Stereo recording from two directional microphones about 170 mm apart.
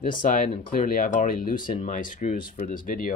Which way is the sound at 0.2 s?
55° left (ahead or behind).